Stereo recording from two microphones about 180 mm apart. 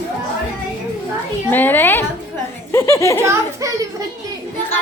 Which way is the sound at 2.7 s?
15° left (ahead or behind).